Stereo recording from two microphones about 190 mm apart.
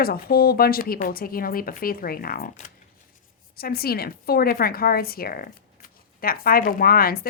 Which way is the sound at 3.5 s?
55° left (ahead or behind).